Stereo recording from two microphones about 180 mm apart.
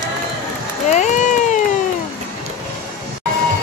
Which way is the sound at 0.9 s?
45° left (ahead or behind).